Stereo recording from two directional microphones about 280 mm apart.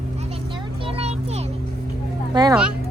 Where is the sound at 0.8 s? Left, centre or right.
Centre.